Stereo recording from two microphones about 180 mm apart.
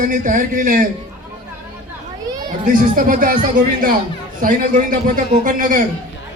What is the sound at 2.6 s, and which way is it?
Speech, 45° right (ahead or behind).